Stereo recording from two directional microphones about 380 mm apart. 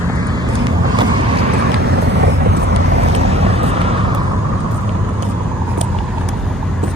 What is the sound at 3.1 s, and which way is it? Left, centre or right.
Vehicle, centre.